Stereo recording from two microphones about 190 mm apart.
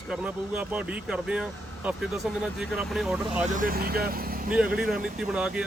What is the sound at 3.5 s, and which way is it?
Speech, 45° right (ahead or behind).